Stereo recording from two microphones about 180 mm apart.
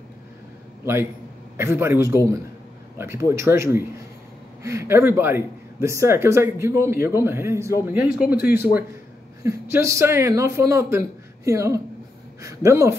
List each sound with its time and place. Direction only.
1.6 s speech: 15° right (ahead or behind)